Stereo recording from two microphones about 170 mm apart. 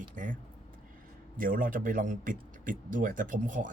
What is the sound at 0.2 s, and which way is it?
Speech, 50° right (ahead or behind).